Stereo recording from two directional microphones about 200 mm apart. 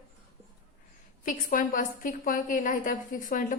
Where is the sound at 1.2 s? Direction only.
40° left (ahead or behind).